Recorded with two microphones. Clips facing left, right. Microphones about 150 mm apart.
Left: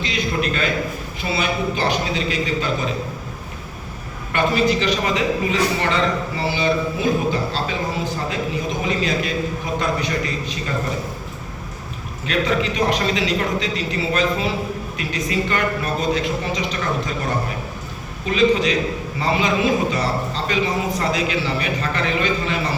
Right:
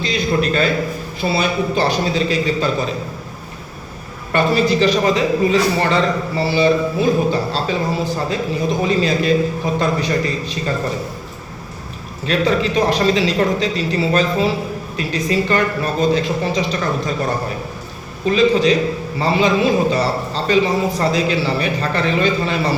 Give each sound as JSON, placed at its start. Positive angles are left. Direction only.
{"t": 0.0, "sound": "a man's voice", "side_deg": -35}
{"t": 4.3, "sound": "a man's voice", "side_deg": -35}
{"t": 12.2, "sound": "a man's voice", "side_deg": -35}